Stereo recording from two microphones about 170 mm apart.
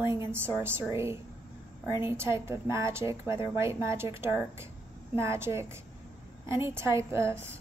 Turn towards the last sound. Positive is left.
turn(degrees=-15)  # may be behind; listen again after turning